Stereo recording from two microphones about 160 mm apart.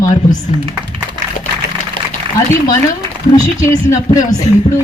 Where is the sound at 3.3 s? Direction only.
20° left (ahead or behind).